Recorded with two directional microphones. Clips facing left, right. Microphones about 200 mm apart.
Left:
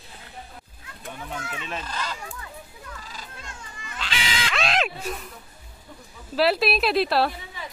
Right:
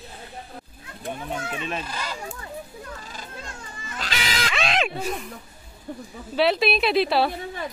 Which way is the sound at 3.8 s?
40° right (ahead or behind).